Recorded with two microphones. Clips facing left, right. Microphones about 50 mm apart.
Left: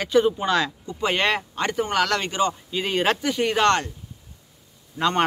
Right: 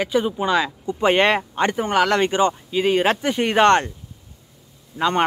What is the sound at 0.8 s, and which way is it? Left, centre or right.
Speech, right.